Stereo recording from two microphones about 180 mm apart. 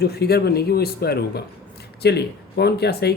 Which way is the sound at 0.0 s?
60° left (ahead or behind).